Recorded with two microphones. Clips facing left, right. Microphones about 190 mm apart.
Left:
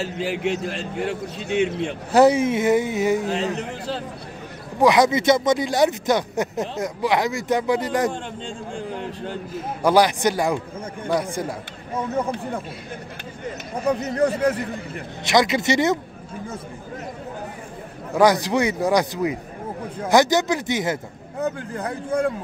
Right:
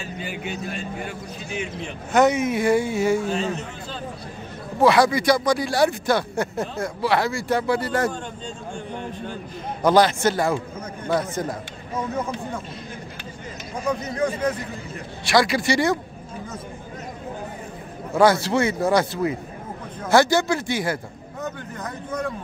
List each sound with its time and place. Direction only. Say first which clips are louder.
0.0 s a man's voice: left 7 dB; 80° left
2.1 s a man's voice: left 3 dB; 30° left (ahead or behind)
4.7 s speech: left 1 dB; 15° left (ahead or behind)
9.8 s speech: even; 15° left (ahead or behind)
13.8 s speech: left 4 dB; 35° left (ahead or behind)
15.2 s a man's voice: left 1 dB; 20° left (ahead or behind)
18.1 s a man's voice: even; 15° left (ahead or behind)